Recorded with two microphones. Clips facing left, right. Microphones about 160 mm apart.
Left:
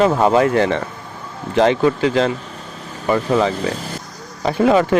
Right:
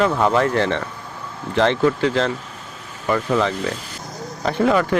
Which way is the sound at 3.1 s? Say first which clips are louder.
Left 3 dB; 30° left (ahead or behind).